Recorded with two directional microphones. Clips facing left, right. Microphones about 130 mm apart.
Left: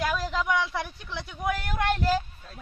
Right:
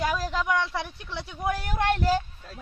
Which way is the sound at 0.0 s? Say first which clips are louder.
Right 1 dB; 5° right (ahead or behind).